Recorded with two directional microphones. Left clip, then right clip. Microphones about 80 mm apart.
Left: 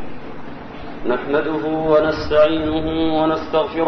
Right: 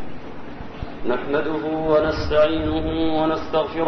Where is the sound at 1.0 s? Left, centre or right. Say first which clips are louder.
Left 3 dB; right.